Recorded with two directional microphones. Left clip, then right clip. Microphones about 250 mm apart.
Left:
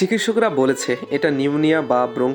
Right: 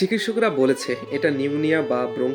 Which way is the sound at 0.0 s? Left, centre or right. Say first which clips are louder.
Left 3 dB; centre.